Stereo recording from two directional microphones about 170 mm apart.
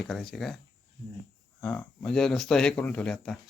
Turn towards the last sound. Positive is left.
turn(degrees=5)  # may be behind; listen again after turning